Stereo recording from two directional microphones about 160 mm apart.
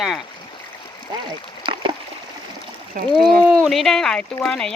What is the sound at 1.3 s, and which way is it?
Splash, 30° right (ahead or behind).